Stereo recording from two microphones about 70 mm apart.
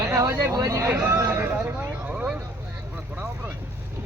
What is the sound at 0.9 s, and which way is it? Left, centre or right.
Speech, right.